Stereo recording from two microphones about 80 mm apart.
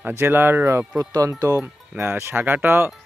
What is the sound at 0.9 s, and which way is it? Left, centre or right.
Speech, right.